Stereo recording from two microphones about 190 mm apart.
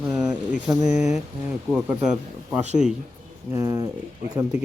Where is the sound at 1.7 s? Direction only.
5° right (ahead or behind).